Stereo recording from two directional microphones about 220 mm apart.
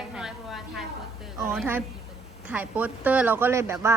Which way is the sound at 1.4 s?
10° right (ahead or behind).